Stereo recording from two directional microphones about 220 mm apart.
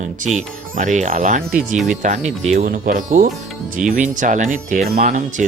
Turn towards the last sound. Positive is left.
turn(degrees=-35)  # may be behind; listen again after turning